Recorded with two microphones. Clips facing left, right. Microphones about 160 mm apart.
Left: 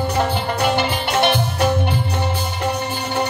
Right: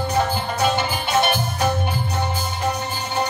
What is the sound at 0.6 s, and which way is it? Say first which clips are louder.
Music: left 1 dB; 65° left (ahead or behind).